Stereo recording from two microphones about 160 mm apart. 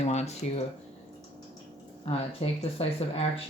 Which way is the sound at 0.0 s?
45° left (ahead or behind).